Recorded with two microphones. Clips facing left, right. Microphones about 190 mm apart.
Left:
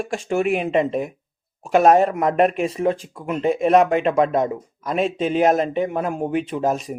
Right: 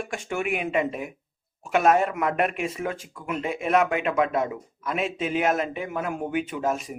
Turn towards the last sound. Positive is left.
turn(degrees=35)  # may be behind; listen again after turning